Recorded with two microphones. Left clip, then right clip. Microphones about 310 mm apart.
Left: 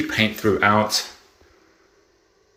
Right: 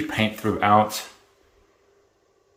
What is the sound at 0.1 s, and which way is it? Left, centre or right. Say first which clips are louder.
Speech: left 6 dB; centre.